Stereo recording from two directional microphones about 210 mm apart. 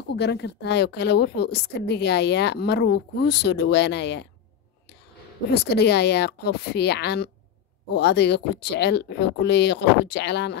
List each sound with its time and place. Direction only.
0.1 s a woman's voice: 55° left (ahead or behind)
5.5 s a woman's voice: 50° left (ahead or behind)